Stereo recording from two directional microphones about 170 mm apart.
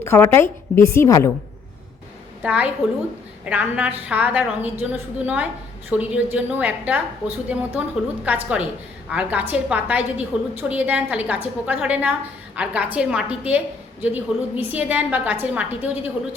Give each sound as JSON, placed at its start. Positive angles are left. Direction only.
{"t": 0.0, "sound": "a woman's voice", "side_deg": 15}
{"t": 2.4, "sound": "a woman's voice", "side_deg": -5}